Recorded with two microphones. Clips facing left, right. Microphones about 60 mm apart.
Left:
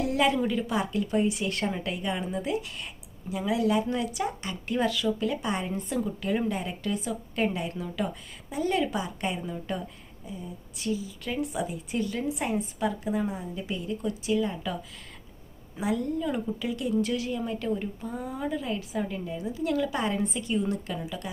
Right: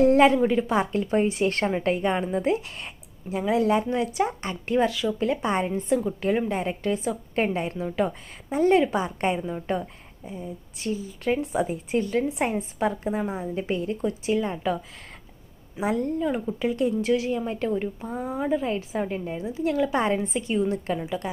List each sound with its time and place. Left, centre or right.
0.0 s a sound: right
0.3 s a woman's voice: right
15.8 s a woman's voice: right
16.2 s speech: right